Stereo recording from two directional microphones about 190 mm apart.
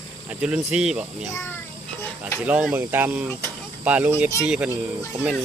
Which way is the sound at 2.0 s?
10° left (ahead or behind).